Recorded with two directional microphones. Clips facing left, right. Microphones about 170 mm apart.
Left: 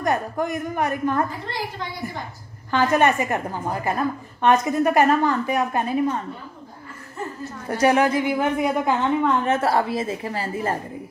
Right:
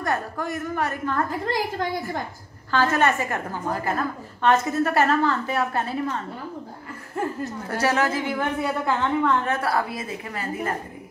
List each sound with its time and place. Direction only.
0.0 s a woman's voice: 15° left (ahead or behind)
2.7 s a woman's voice: 15° left (ahead or behind)
7.8 s a woman's voice: 15° left (ahead or behind)